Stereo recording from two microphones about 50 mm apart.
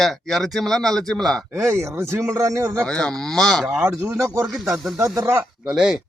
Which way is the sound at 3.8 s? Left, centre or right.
Right.